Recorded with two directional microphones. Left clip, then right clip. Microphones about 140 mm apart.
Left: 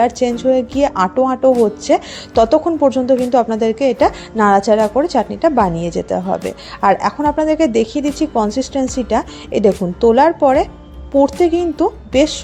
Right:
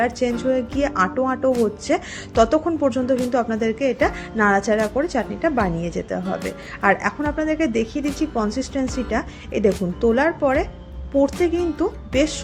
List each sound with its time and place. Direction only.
0.0 s a woman's voice: 30° left (ahead or behind)